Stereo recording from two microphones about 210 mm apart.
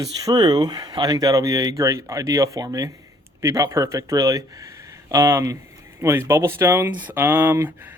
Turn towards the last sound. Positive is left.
turn(degrees=-10)  # may be behind; listen again after turning